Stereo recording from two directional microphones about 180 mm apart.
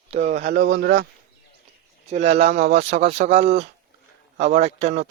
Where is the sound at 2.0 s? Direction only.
35° right (ahead or behind).